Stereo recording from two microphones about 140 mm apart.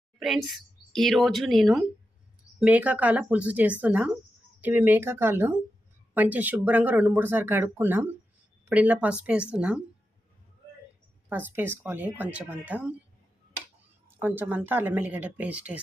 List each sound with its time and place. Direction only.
0.9 s speech: centre (ahead or behind)
11.3 s speech: 15° right (ahead or behind)
14.2 s speech: 15° right (ahead or behind)